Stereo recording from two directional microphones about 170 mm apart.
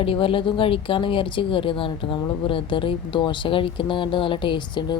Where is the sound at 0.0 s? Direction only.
30° left (ahead or behind).